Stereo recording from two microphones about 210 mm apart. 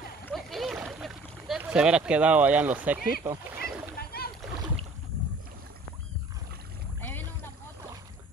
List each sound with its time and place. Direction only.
0.2 s boat: centre (ahead or behind)
4.0 s rowboat: 45° left (ahead or behind)
7.0 s boat: 10° left (ahead or behind)